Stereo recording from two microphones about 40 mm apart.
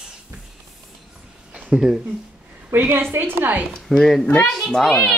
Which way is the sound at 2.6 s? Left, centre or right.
Right.